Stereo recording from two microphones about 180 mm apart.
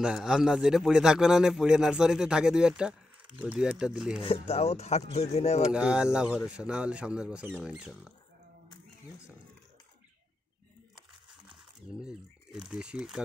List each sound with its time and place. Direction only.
0.0 s a man's voice: 5° right (ahead or behind)
4.2 s speech: 35° left (ahead or behind)
5.7 s a man's voice: 5° right (ahead or behind)
11.9 s speech: 5° right (ahead or behind)